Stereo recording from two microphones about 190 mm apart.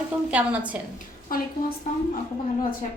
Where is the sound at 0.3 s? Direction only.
5° right (ahead or behind).